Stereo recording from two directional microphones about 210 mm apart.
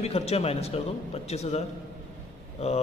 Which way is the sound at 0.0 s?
30° left (ahead or behind).